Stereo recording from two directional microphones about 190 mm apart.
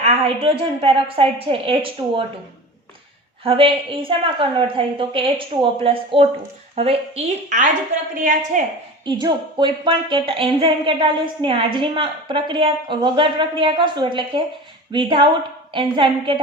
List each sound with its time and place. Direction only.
0.0 s a woman's voice: 30° right (ahead or behind)
3.4 s a woman's voice: 30° right (ahead or behind)
8.1 s a woman's voice: 45° right (ahead or behind)
9.0 s a woman's voice: 25° right (ahead or behind)